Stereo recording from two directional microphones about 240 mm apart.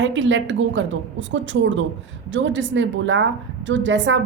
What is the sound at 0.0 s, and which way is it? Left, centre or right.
A woman's voice, right.